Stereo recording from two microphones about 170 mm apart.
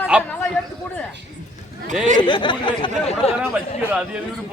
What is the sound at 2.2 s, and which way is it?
Speech, 25° left (ahead or behind).